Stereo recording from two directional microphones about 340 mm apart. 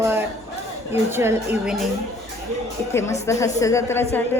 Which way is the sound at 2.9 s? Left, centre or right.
Centre.